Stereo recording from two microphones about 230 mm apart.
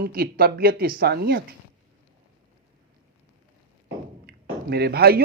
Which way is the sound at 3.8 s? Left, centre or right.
Right.